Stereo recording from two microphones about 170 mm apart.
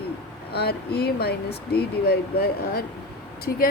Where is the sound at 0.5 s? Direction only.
70° left (ahead or behind).